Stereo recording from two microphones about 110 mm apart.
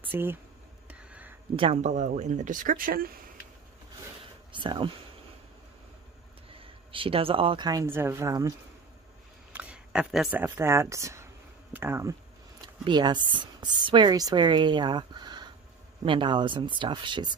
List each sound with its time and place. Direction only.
0.1 s speech: 20° right (ahead or behind)
0.8 s a sound: 10° right (ahead or behind)
1.6 s speech: 75° right (ahead or behind)
4.5 s a sound: 50° right (ahead or behind)
6.5 s speech: 55° right (ahead or behind)
7.8 s speech: 20° right (ahead or behind)
9.5 s a sound: 10° right (ahead or behind)
10.4 s speech: 25° right (ahead or behind)
12.8 s speech: 40° right (ahead or behind)